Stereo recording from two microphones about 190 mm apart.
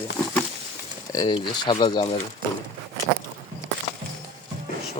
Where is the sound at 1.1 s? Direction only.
20° left (ahead or behind).